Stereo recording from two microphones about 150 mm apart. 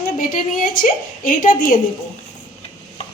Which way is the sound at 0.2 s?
65° left (ahead or behind).